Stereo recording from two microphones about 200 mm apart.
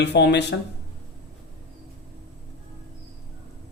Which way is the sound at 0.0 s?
60° left (ahead or behind).